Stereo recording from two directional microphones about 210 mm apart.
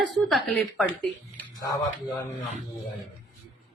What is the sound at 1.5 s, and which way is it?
Speech, 15° left (ahead or behind).